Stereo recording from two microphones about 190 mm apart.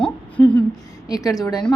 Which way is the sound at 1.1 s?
20° left (ahead or behind).